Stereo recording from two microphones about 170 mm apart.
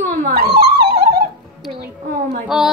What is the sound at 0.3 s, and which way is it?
Dog, 65° right (ahead or behind).